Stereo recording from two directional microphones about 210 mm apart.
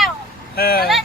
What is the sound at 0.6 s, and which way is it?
Speech, 45° left (ahead or behind).